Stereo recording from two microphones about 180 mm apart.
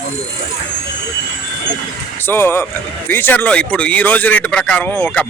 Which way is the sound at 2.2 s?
15° left (ahead or behind).